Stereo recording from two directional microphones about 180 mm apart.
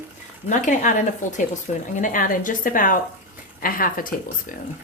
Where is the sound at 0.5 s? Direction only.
45° left (ahead or behind).